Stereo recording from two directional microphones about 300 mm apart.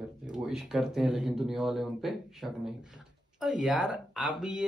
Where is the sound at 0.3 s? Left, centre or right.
Centre.